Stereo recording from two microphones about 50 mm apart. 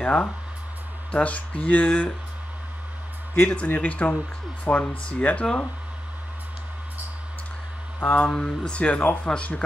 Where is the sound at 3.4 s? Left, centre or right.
Left.